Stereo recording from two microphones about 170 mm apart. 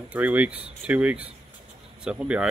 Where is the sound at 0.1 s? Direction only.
10° right (ahead or behind).